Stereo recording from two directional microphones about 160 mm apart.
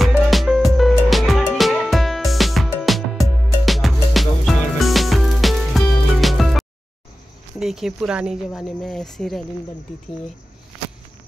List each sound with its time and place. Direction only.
0.2 s music: centre (ahead or behind)
7.5 s speech: centre (ahead or behind)